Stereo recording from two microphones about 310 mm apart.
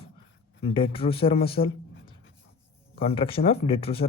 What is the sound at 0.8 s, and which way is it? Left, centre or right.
Speech, centre.